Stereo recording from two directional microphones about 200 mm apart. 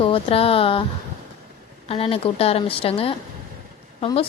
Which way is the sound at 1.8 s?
30° left (ahead or behind).